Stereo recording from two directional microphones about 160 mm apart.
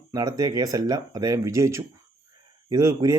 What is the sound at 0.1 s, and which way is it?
A man's voice, 25° right (ahead or behind).